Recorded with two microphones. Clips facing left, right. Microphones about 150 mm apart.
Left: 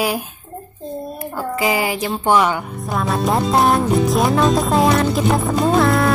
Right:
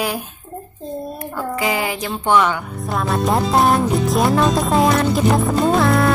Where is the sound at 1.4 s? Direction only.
5° left (ahead or behind).